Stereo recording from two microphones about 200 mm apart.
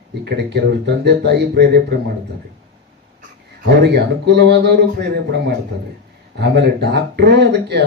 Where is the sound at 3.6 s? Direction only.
55° right (ahead or behind).